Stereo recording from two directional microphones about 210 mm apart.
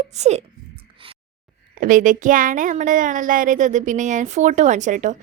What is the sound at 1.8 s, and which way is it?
Speech, 40° right (ahead or behind).